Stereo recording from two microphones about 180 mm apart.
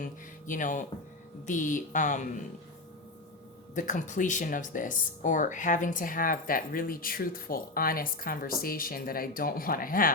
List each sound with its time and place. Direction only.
0.0 s speech: 45° left (ahead or behind)
3.8 s speech: 45° left (ahead or behind)